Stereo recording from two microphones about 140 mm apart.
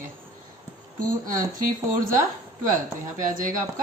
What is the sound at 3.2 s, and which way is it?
Speech, 75° right (ahead or behind).